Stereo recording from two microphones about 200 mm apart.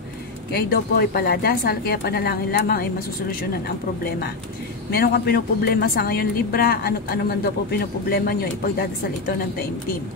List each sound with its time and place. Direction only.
0.6 s a woman's voice: 50° left (ahead or behind)
4.9 s a woman's voice: 50° left (ahead or behind)